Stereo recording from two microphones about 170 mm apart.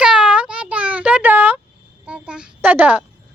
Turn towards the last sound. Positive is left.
turn(degrees=-10)  # may be behind; listen again after turning